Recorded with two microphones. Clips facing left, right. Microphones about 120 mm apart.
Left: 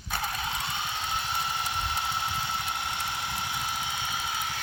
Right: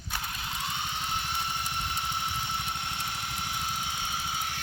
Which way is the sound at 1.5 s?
90° left.